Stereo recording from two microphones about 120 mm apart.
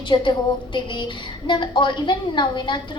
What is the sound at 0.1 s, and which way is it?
A child's voice, 40° left (ahead or behind).